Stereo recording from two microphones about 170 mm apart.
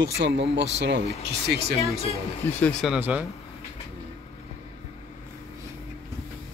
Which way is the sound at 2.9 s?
10° right (ahead or behind).